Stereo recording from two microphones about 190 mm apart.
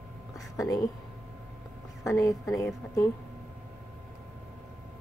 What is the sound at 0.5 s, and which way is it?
Speech, 20° left (ahead or behind).